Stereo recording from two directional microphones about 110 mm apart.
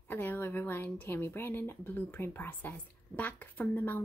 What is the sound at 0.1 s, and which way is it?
Speech, 20° left (ahead or behind).